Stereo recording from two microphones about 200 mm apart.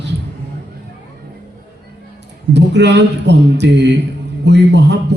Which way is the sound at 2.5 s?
60° right (ahead or behind).